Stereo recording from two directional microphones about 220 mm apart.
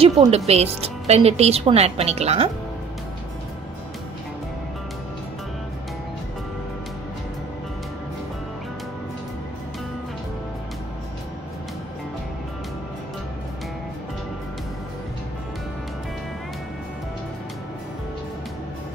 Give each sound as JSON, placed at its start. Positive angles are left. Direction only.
{"t": 0.0, "sound": "a woman's voice", "side_deg": -25}